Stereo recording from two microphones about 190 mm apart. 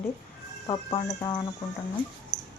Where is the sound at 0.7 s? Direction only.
20° left (ahead or behind).